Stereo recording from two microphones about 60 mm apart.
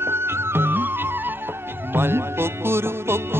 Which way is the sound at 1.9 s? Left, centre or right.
Right.